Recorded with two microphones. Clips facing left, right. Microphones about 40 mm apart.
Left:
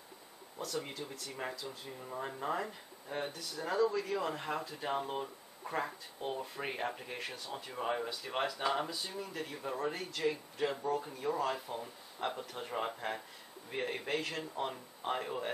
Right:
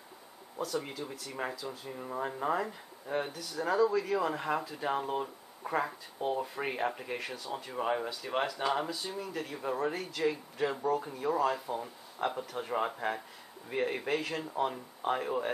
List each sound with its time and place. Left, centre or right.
0.6 s speech: centre
2.0 s speech: centre
7.7 s speech: centre